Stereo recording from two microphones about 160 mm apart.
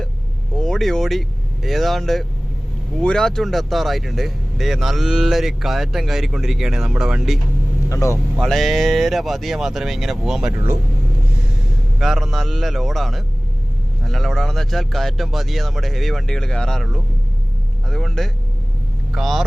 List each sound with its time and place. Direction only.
0.5 s vehicle: 5° left (ahead or behind)
1.6 s speech: centre (ahead or behind)
7.9 s speech: 20° left (ahead or behind)
8.4 s speech: centre (ahead or behind)
11.9 s speech: centre (ahead or behind)